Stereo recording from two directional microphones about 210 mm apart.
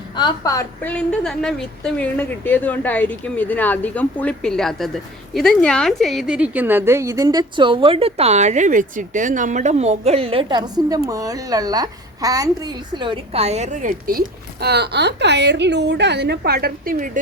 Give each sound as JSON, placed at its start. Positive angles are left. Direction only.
{"t": 0.2, "sound": "a woman's voice", "side_deg": 20}